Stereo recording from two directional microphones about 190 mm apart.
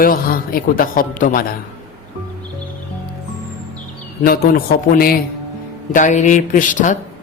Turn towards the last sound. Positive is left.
turn(degrees=40)  # may be behind; listen again after turning